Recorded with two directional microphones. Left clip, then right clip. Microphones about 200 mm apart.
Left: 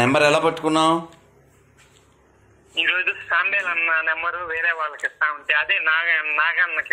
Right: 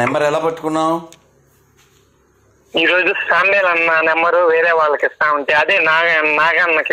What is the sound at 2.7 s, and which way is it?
Speech, 75° right (ahead or behind).